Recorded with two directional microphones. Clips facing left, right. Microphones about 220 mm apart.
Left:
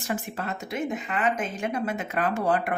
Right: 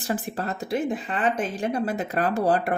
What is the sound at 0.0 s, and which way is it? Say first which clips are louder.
Speech: right 3 dB; 35° right (ahead or behind).